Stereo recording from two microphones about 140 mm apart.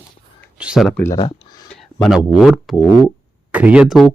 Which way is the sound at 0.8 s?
10° left (ahead or behind).